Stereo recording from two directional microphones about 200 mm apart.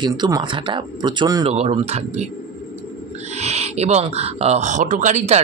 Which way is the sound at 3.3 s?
35° right (ahead or behind).